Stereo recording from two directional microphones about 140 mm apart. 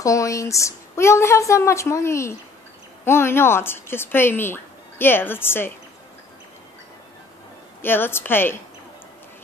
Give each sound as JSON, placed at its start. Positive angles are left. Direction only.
{"t": 0.0, "sound": "a woman's voice", "side_deg": 20}
{"t": 7.8, "sound": "speech", "side_deg": 15}